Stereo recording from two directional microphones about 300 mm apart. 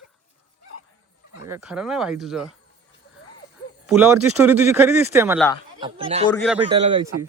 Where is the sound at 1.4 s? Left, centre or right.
Centre.